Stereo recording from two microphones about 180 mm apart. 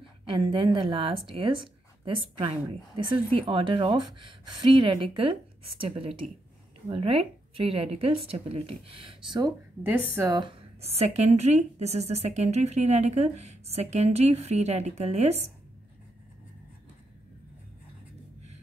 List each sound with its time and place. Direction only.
0.2 s speech: 30° right (ahead or behind)
9.8 s speech: 10° right (ahead or behind)
10.3 s speech: 25° right (ahead or behind)